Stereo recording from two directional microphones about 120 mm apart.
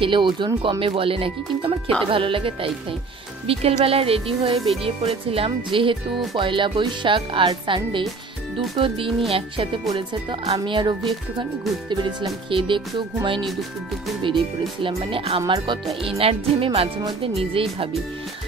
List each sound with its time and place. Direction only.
0.0 s speech: 40° right (ahead or behind)
10.6 s speech: 40° right (ahead or behind)
13.5 s speech: centre (ahead or behind)
14.8 s speech: 45° right (ahead or behind)
16.0 s speech: 55° right (ahead or behind)